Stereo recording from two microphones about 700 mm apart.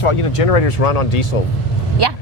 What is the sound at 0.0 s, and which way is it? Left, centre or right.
Speech, left.